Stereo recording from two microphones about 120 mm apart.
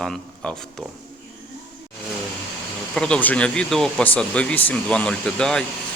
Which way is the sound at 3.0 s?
5° left (ahead or behind).